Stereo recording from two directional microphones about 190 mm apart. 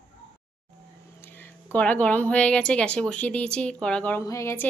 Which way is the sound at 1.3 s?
10° left (ahead or behind).